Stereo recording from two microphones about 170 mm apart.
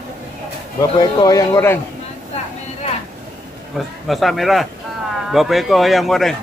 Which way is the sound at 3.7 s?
Centre (ahead or behind).